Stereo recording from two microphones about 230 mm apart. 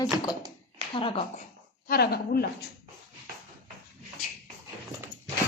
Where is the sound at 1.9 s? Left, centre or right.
Left.